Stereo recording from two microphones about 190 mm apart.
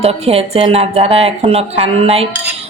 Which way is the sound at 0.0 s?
30° right (ahead or behind).